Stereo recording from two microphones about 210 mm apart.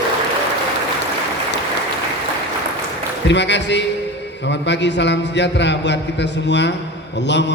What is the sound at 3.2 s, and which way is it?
A man's voice, 55° left (ahead or behind).